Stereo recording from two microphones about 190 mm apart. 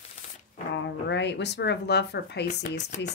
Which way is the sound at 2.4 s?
40° left (ahead or behind).